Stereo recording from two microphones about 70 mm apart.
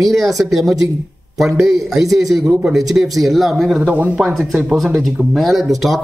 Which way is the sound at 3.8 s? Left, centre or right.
Right.